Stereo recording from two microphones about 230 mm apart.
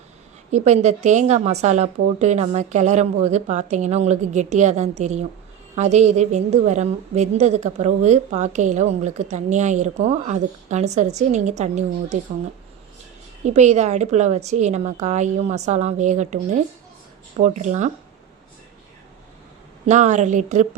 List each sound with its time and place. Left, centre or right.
0.5 s a woman's voice: right
13.4 s a woman's voice: right
19.9 s a woman's voice: right